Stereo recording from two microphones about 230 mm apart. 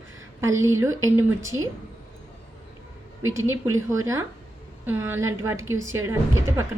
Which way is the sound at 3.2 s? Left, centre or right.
Right.